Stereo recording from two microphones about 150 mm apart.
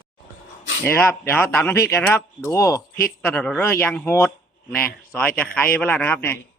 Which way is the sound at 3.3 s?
10° left (ahead or behind).